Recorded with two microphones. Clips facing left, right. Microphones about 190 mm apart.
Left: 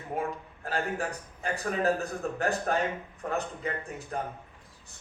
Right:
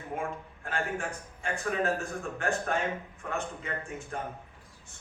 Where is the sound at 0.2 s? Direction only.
35° left (ahead or behind).